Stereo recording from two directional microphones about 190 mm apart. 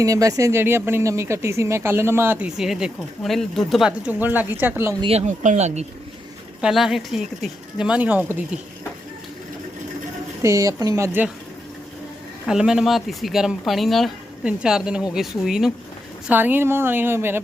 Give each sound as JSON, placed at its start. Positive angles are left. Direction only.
{"t": 0.0, "sound": "speech", "side_deg": -15}
{"t": 4.9, "sound": "speech", "side_deg": -30}
{"t": 6.6, "sound": "speech", "side_deg": 0}
{"t": 10.4, "sound": "speech", "side_deg": -15}
{"t": 12.5, "sound": "speech", "side_deg": -5}